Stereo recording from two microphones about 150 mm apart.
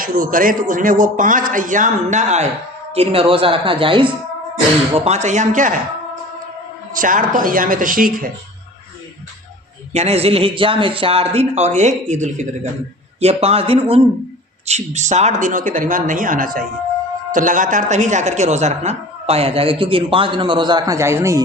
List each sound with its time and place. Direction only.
0.0 s a woman's voice: 65° right (ahead or behind); by 4.1 s 35° right (ahead or behind)
4.9 s a man's voice: 45° right (ahead or behind)
6.9 s a woman's voice: 65° right (ahead or behind)
9.9 s a man's voice: 45° right (ahead or behind); by 21.4 s 20° right (ahead or behind)